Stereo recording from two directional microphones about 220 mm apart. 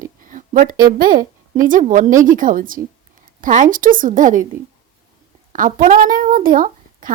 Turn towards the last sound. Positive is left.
turn(degrees=-40)  # may be behind; listen again after turning